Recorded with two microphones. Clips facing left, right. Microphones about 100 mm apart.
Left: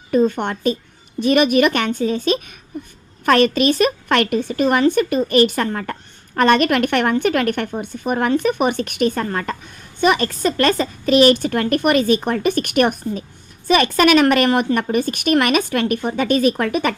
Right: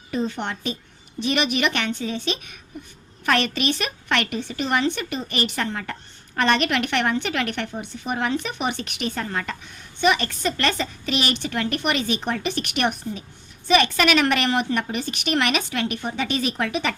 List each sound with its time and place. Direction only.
0.1 s a woman's voice: 50° left (ahead or behind)